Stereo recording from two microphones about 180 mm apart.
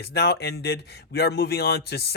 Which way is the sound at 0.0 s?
65° left (ahead or behind).